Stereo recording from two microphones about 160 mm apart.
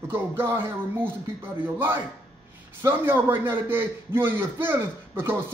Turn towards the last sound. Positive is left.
turn(degrees=-15)  # may be behind; listen again after turning